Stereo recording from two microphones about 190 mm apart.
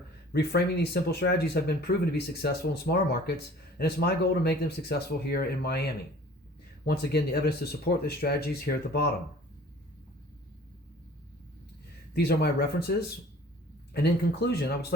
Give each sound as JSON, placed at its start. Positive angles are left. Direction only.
{"t": 0.3, "sound": "speech", "side_deg": 55}
{"t": 12.1, "sound": "speech", "side_deg": 60}